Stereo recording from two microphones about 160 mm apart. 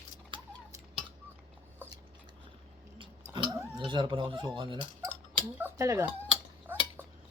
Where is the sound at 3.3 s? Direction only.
30° right (ahead or behind).